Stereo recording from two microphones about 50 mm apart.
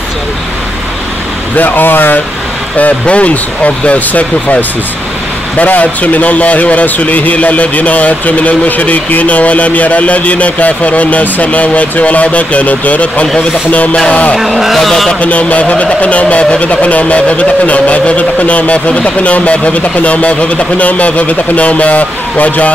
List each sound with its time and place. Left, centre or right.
1.6 s speech: left
2.8 s a man's voice: left
13.9 s music: centre
14.3 s speech: centre
15.1 s a man's voice: left